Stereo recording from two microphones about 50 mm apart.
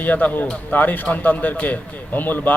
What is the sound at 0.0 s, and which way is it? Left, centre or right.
A man's voice, left.